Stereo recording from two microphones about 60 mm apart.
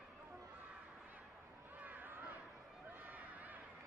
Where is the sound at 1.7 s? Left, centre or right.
Right.